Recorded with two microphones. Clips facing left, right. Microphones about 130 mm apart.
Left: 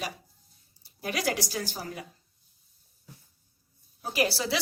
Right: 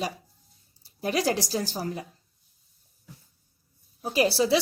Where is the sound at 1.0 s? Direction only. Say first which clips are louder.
Right 4 dB; 30° right (ahead or behind).